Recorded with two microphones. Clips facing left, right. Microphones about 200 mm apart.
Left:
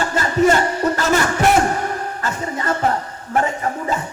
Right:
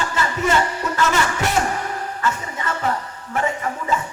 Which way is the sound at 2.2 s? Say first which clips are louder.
Left 2 dB; 40° left (ahead or behind).